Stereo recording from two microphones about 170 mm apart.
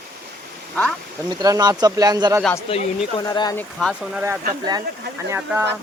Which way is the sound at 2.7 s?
30° left (ahead or behind).